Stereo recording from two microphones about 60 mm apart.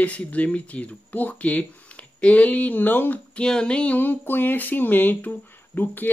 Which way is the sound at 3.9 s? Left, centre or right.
Left.